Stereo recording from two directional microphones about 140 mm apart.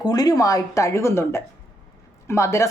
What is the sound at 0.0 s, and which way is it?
A woman's voice, 25° left (ahead or behind).